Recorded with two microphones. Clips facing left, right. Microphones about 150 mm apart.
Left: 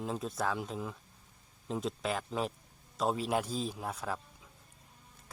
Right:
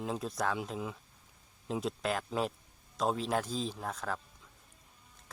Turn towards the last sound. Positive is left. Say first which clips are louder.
# even
turn(degrees=10)  # may be behind; listen again after turning